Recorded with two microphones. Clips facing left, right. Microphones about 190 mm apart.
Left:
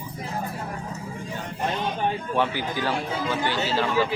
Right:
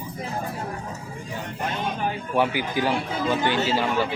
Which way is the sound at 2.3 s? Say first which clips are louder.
Right 2 dB; 10° right (ahead or behind).